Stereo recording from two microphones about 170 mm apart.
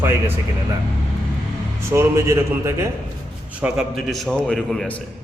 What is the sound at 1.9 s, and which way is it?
Speech, 15° right (ahead or behind).